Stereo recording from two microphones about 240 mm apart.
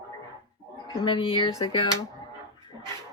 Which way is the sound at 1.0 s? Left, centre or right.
Left.